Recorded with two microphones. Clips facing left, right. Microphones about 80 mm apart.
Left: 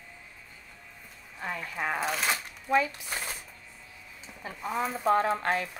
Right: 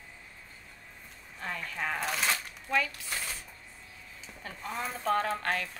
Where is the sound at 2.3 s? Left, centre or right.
Centre.